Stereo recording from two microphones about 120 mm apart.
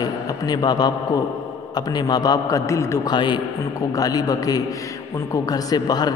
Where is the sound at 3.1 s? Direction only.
40° left (ahead or behind).